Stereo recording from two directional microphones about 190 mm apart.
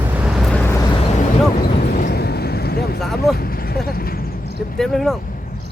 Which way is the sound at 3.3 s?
50° left (ahead or behind).